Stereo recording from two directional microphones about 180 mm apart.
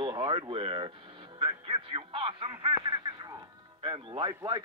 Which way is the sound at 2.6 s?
25° right (ahead or behind).